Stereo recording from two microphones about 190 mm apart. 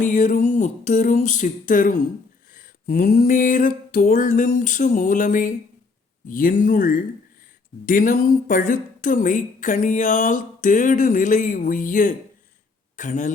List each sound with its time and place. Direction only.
0.0 s speech: 45° left (ahead or behind)